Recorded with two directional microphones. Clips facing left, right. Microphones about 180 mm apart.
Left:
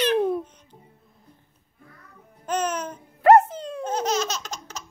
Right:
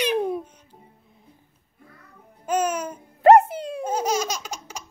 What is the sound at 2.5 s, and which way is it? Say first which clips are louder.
Music: right 2 dB; 10° right (ahead or behind).